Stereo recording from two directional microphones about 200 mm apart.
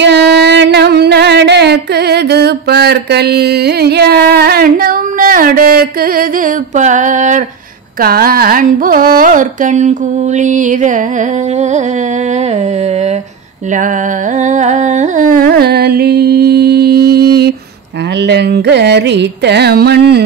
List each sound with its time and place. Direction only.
0.0 s music: 60° right (ahead or behind); by 7.4 s 40° right (ahead or behind)
8.0 s carnatic music: 50° right (ahead or behind)
14.4 s carnatic music: 35° right (ahead or behind); by 20.2 s 55° right (ahead or behind)